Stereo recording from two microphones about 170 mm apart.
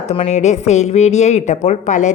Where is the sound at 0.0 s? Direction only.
40° left (ahead or behind).